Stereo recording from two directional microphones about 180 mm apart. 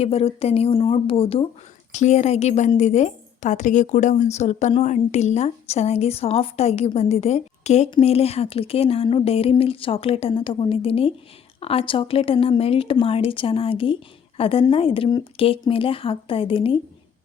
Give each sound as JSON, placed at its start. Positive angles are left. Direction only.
{"t": 0.0, "sound": "a woman's voice", "side_deg": 35}